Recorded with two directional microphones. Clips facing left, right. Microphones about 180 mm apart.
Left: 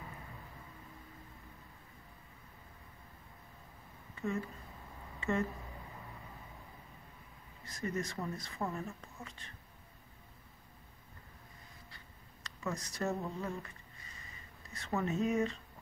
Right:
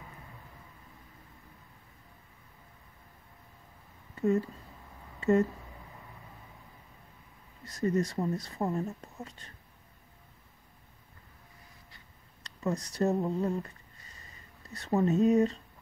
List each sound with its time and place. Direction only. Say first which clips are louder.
4.1 s speech: right 10 dB; 40° right (ahead or behind)
7.6 s speech: right 9 dB; 35° right (ahead or behind)
12.4 s speech: right 7 dB; 35° right (ahead or behind)